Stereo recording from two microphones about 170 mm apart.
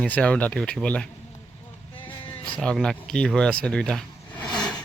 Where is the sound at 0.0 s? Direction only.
5° left (ahead or behind).